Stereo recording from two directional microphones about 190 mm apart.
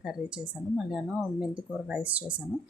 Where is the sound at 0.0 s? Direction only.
5° right (ahead or behind).